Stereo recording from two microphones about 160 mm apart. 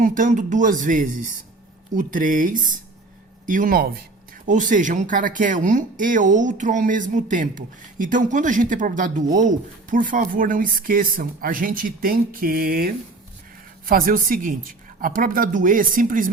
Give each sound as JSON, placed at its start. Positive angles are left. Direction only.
{"t": 0.0, "sound": "speech", "side_deg": -55}
{"t": 4.4, "sound": "speech", "side_deg": -55}